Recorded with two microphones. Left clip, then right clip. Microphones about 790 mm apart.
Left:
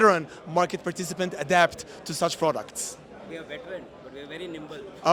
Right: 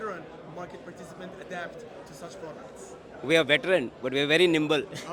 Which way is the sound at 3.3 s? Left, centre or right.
Right.